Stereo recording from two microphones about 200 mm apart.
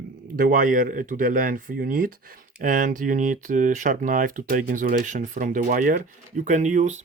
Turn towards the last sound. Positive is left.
turn(degrees=-35)  # may be behind; listen again after turning